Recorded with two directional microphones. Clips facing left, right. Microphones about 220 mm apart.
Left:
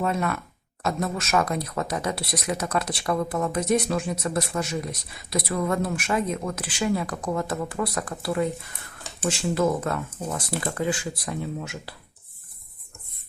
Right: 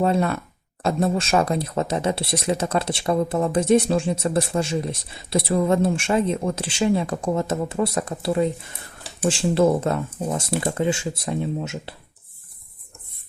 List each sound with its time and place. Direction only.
0.0 s speech: 30° right (ahead or behind)